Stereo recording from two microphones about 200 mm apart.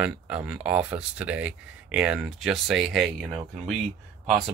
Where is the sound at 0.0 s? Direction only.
5° right (ahead or behind).